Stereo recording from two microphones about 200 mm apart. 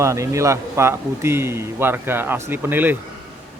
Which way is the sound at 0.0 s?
15° right (ahead or behind).